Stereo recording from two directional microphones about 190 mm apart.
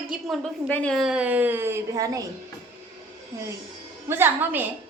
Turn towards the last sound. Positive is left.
turn(degrees=-10)  # may be behind; listen again after turning